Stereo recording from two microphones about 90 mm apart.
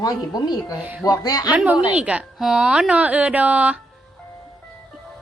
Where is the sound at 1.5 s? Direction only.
15° right (ahead or behind).